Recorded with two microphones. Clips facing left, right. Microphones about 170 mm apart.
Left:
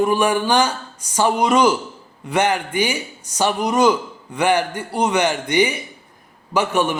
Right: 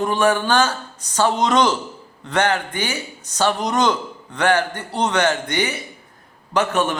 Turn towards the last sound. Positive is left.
turn(degrees=10)  # may be behind; listen again after turning